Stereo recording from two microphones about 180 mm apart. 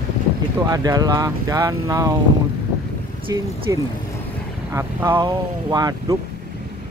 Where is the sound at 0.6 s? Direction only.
20° right (ahead or behind).